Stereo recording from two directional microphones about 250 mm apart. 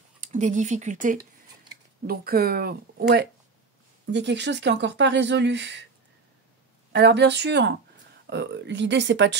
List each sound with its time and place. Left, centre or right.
0.2 s speech: right
6.9 s speech: right